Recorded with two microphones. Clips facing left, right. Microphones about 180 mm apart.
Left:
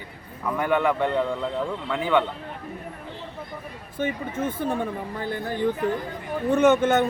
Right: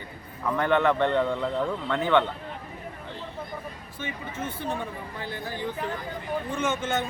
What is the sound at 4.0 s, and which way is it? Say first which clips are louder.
Speech: left 9 dB; 50° left (ahead or behind).